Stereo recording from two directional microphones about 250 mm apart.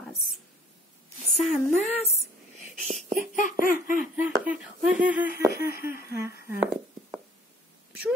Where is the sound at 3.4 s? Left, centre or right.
Left.